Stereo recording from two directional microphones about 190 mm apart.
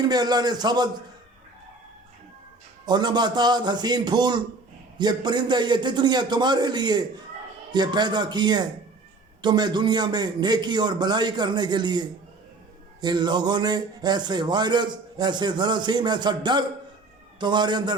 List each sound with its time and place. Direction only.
0.1 s a man's voice: 20° right (ahead or behind)
2.8 s a man's voice: 20° right (ahead or behind)